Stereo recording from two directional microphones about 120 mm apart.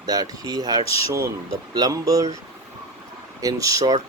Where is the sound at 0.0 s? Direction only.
30° right (ahead or behind).